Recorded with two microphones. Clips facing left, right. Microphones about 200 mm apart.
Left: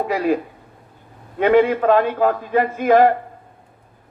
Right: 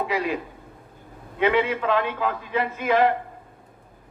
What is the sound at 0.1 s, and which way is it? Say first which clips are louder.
Speech: left 7 dB; 45° left (ahead or behind).